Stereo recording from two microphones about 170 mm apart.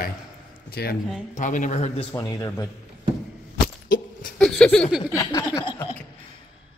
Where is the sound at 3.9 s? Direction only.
55° left (ahead or behind).